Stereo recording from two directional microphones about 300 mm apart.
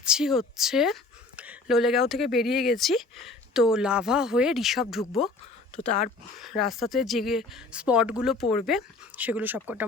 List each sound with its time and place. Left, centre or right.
0.0 s speech: centre
6.4 s speech: centre